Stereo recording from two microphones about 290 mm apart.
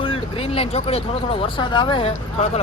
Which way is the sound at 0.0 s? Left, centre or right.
Centre.